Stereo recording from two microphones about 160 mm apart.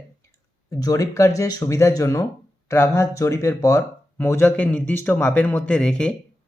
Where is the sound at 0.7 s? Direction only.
20° left (ahead or behind).